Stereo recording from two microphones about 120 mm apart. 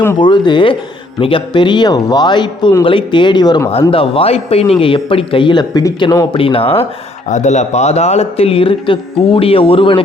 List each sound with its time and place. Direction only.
0.2 s speech: 40° left (ahead or behind)
3.7 s a man's voice: 50° left (ahead or behind); by 6.2 s 30° left (ahead or behind)
6.3 s a man's voice: 50° left (ahead or behind)
7.3 s speech: 85° left; by 10.0 s 45° left (ahead or behind)